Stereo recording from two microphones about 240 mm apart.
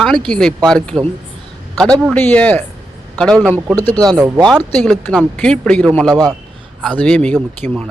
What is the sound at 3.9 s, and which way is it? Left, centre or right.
Speech, centre.